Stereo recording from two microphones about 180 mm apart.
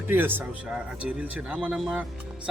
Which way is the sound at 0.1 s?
10° right (ahead or behind).